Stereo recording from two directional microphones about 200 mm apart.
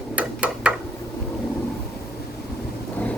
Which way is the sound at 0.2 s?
5° right (ahead or behind).